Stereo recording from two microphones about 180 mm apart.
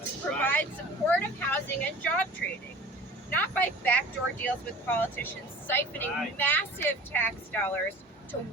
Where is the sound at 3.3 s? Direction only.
10° left (ahead or behind).